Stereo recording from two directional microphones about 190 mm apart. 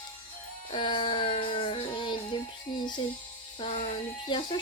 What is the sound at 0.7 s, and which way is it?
Music, 25° left (ahead or behind).